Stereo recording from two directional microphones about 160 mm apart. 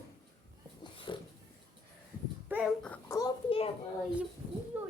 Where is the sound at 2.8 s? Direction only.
10° left (ahead or behind).